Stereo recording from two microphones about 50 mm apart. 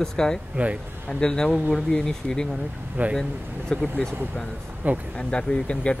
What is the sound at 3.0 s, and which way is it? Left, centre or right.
Speech, right.